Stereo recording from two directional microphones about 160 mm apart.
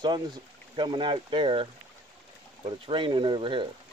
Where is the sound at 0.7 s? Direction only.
30° right (ahead or behind).